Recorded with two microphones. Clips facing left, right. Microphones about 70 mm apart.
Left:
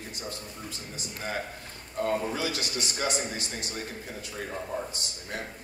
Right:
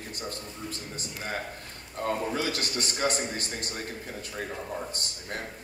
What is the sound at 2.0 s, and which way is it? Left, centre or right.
A man's voice, right.